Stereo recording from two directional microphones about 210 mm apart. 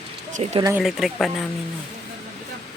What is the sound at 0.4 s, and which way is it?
Speech, 30° right (ahead or behind).